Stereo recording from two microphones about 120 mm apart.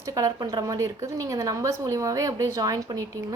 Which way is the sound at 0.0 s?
30° right (ahead or behind).